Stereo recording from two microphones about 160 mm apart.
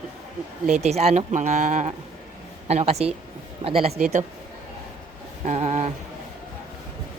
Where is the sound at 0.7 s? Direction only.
40° right (ahead or behind).